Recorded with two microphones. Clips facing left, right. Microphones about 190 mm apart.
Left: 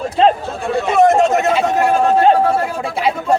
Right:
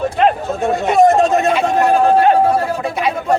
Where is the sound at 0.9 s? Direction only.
30° right (ahead or behind).